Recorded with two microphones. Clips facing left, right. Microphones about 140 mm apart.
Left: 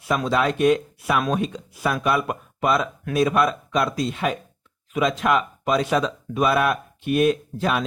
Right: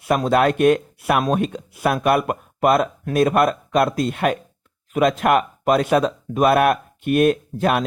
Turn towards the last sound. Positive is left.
turn(degrees=-55)  # may be behind; listen again after turning